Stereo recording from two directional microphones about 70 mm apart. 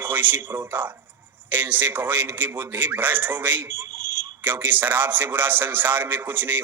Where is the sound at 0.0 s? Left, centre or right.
Right.